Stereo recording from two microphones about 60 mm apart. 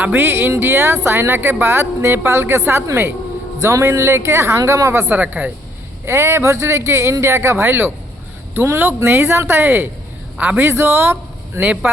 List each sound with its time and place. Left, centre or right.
0.0 s speech: right
5.1 s speech: right
6.1 s a man's voice: right
10.6 s speech: right
11.6 s speech: right